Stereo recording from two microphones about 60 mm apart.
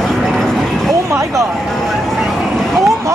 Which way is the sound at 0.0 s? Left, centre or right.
Centre.